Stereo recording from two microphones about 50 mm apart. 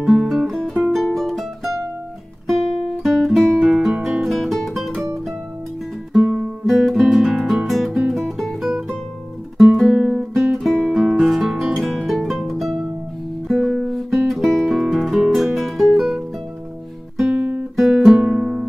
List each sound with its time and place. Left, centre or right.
0.0 s music: centre
0.3 s music: centre
2.4 s guitar: centre
4.0 s music: centre
6.2 s music: centre
6.7 s music: centre
9.8 s guitar: centre
10.0 s guitar: centre
11.1 s music: centre
13.6 s guitar: centre
13.8 s music: centre
17.3 s guitar: right
17.7 s music: centre